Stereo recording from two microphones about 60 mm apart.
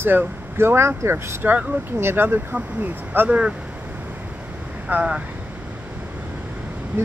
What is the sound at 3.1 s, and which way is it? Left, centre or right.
Speech, right.